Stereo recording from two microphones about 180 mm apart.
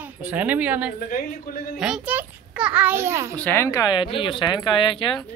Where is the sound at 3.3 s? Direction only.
10° left (ahead or behind); by 5.0 s 30° left (ahead or behind).